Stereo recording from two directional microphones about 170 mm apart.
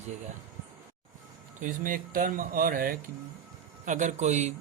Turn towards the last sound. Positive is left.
turn(degrees=-40)  # may be behind; listen again after turning